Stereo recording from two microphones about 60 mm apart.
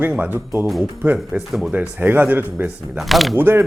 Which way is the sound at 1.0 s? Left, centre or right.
Right.